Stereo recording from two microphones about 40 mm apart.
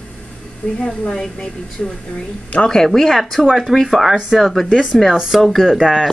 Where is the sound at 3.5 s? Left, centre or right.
Centre.